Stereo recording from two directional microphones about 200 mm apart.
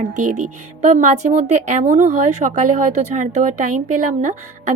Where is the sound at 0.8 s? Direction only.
35° right (ahead or behind).